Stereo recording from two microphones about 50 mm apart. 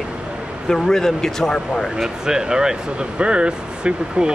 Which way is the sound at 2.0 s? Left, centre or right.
Centre.